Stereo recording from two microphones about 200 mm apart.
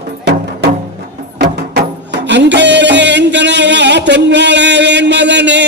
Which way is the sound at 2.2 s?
60° right (ahead or behind).